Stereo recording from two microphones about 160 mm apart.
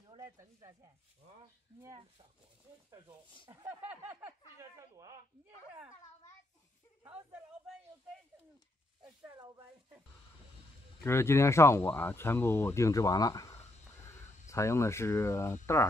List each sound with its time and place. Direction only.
0.2 s speech: 20° right (ahead or behind)
3.4 s speech: 30° left (ahead or behind)
3.9 s a sound: 10° right (ahead or behind)
9.0 s speech: 25° right (ahead or behind)
11.1 s speech: 15° left (ahead or behind)